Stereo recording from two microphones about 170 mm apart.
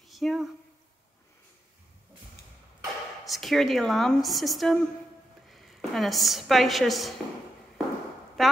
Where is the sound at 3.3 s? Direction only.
Centre (ahead or behind).